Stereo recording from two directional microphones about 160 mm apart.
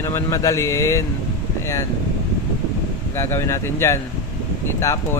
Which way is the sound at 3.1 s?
15° left (ahead or behind).